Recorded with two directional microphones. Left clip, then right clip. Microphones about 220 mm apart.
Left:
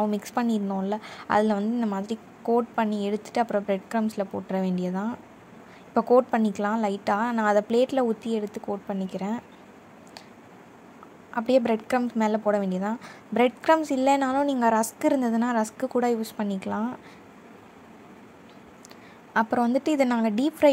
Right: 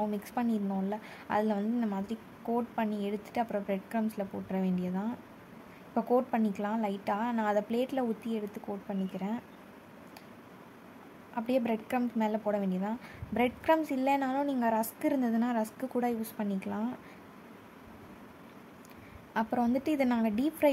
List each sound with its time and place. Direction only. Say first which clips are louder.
0.1 s a woman's voice: left 7 dB; 20° left (ahead or behind)
11.3 s a woman's voice: left 9 dB; 20° left (ahead or behind)
19.3 s a woman's voice: left 7 dB; 15° left (ahead or behind)